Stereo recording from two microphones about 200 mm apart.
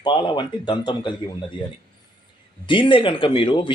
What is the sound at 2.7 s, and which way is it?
Speech, 25° left (ahead or behind).